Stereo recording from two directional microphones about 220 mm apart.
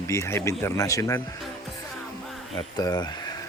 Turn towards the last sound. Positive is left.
turn(degrees=15)  # may be behind; listen again after turning